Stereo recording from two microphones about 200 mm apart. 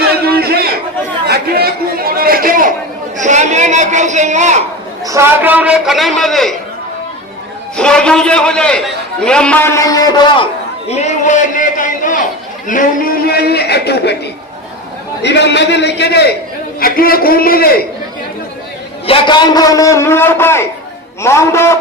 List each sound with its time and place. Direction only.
0.4 s chatter: 50° right (ahead or behind)
3.2 s a man's voice: 35° right (ahead or behind)
5.0 s a man's voice: 15° right (ahead or behind)
7.8 s a man's voice: 5° left (ahead or behind)
10.8 s a man's voice: 35° left (ahead or behind); by 14.2 s 55° left (ahead or behind)
15.2 s a man's voice: 60° left (ahead or behind)
19.0 s a man's voice: 25° left (ahead or behind)